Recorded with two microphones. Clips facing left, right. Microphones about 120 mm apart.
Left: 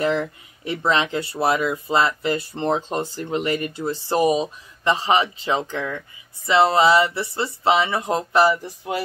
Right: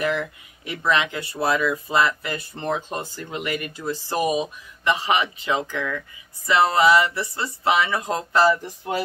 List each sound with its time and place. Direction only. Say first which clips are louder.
0.0 s speech: left 3 dB; 30° left (ahead or behind)